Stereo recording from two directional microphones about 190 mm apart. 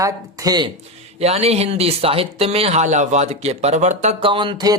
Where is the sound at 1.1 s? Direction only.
35° right (ahead or behind).